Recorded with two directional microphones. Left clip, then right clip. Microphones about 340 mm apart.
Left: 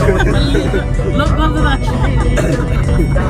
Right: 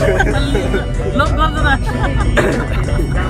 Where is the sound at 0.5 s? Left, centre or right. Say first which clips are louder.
Left 2 dB; centre.